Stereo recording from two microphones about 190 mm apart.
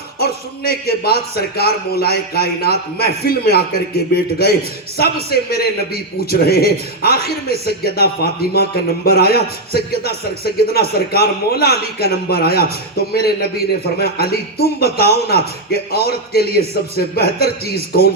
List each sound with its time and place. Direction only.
0.2 s a man's voice: 55° left (ahead or behind)